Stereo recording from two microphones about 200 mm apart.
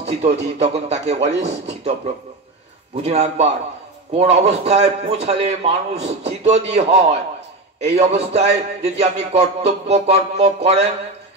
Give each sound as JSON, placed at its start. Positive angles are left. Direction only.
{"t": 0.2, "sound": "a man's voice", "side_deg": -30}
{"t": 3.0, "sound": "a man's voice", "side_deg": -30}